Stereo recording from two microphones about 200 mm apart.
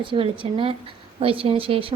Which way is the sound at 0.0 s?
25° right (ahead or behind).